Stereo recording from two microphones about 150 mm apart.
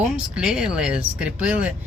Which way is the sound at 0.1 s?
5° right (ahead or behind).